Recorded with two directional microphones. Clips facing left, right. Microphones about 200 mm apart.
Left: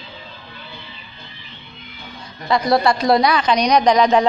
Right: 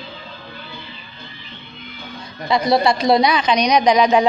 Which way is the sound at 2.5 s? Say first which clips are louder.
Even; 25° right (ahead or behind).